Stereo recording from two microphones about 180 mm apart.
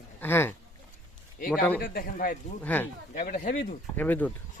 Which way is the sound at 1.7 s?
55° left (ahead or behind).